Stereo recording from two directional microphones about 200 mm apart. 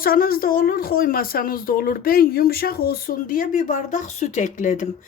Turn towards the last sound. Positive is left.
turn(degrees=40)  # may be behind; listen again after turning